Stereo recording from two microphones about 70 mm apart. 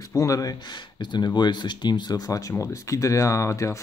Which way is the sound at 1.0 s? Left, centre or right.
Left.